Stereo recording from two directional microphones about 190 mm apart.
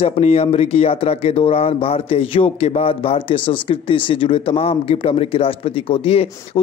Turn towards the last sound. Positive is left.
turn(degrees=30)  # may be behind; listen again after turning